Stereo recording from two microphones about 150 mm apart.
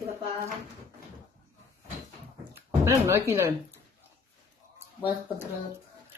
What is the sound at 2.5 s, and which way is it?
Speech, 20° right (ahead or behind).